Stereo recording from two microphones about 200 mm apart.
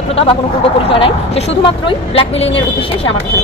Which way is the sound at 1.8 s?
25° left (ahead or behind).